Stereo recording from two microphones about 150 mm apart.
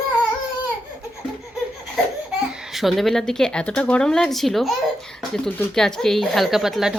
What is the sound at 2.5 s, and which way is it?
A woman's voice, centre (ahead or behind).